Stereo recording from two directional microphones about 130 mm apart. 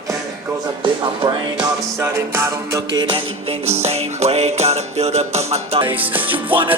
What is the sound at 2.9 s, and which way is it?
Music, 40° right (ahead or behind).